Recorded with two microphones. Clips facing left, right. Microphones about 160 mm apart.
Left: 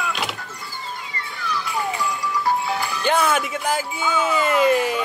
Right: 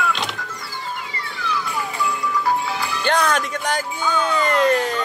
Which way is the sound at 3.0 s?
5° left (ahead or behind).